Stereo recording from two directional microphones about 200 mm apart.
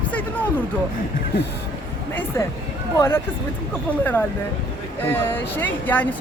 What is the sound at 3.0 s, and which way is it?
Speech, 10° left (ahead or behind).